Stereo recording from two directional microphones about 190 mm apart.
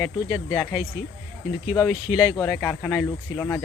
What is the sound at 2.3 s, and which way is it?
Speech, 15° left (ahead or behind).